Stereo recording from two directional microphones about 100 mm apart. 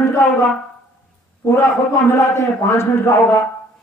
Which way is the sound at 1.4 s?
30° left (ahead or behind).